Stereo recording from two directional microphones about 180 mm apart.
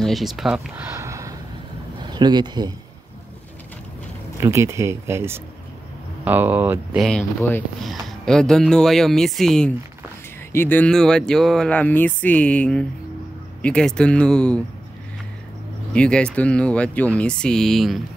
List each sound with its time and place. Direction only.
0.0 s speech: centre (ahead or behind); by 2.7 s 25° right (ahead or behind)
4.4 s speech: 15° right (ahead or behind)
7.0 s speech: 5° left (ahead or behind)
15.9 s speech: 5° left (ahead or behind)